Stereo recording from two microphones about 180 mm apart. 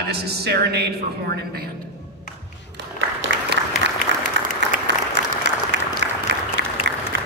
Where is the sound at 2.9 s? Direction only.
80° right.